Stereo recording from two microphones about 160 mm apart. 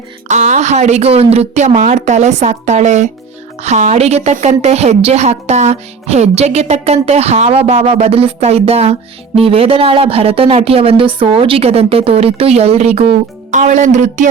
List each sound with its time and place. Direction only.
0.3 s a woman's voice: 50° right (ahead or behind)